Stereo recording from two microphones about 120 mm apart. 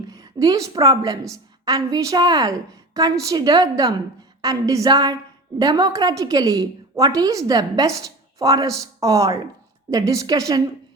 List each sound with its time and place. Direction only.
0.1 s a woman's voice: 30° right (ahead or behind)